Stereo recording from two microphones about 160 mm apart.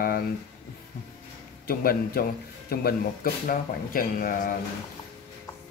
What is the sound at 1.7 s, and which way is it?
A man's voice, 70° left (ahead or behind).